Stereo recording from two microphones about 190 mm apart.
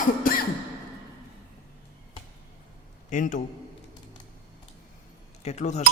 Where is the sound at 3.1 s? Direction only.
40° left (ahead or behind).